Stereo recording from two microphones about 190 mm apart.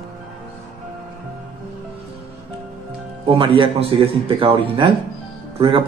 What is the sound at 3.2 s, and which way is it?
A man's voice, 30° right (ahead or behind).